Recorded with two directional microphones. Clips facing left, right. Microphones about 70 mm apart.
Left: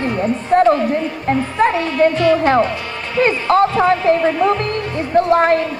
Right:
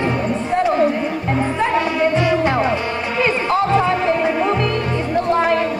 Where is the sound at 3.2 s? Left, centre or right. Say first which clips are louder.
Left 5 dB; left.